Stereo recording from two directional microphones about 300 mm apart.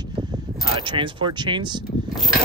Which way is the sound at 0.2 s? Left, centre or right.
Centre.